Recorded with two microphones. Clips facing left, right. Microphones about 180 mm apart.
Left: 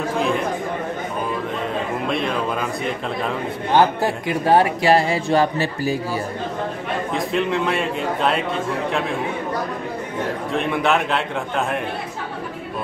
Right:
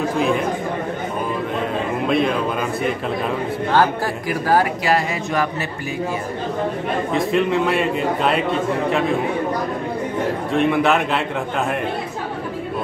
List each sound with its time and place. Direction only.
2.0 s speech: centre (ahead or behind)
3.7 s speech: 20° left (ahead or behind)
7.2 s a man's voice: centre (ahead or behind)
10.5 s a man's voice: centre (ahead or behind)